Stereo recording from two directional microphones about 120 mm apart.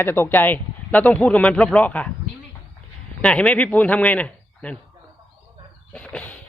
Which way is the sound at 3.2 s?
5° left (ahead or behind).